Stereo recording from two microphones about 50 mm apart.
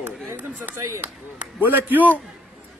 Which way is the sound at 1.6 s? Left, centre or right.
Right.